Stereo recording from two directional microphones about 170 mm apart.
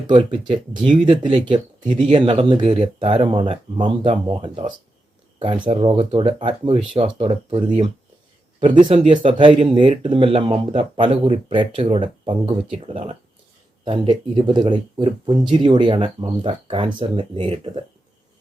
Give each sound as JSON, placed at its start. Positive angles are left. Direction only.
{"t": 0.1, "sound": "speech", "side_deg": -30}
{"t": 5.6, "sound": "speech", "side_deg": -30}